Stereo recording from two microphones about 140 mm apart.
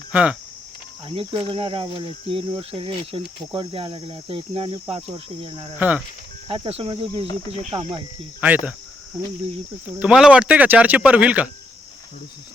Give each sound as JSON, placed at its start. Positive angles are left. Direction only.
{"t": 0.1, "sound": "speech", "side_deg": -10}
{"t": 1.0, "sound": "cricket", "side_deg": -40}
{"t": 5.7, "sound": "speech", "side_deg": -10}
{"t": 6.5, "sound": "cricket", "side_deg": -45}
{"t": 8.4, "sound": "speech", "side_deg": -10}
{"t": 10.0, "sound": "speech", "side_deg": -5}